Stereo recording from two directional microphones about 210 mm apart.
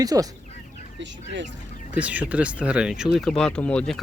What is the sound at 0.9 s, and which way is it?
Speech, 60° right (ahead or behind).